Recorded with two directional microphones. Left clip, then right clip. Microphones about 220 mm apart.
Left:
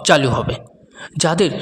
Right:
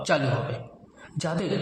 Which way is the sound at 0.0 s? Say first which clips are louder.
Left 11 dB; 40° left (ahead or behind).